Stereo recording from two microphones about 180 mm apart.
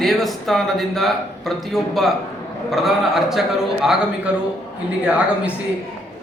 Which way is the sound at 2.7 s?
Centre (ahead or behind).